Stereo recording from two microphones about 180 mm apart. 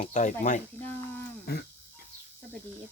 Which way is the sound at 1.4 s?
60° left (ahead or behind).